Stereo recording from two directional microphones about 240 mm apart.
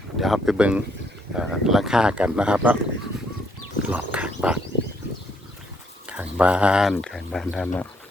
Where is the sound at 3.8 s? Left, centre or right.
Centre.